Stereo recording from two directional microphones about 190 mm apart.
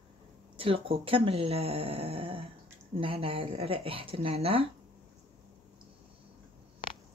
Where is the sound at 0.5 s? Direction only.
30° right (ahead or behind).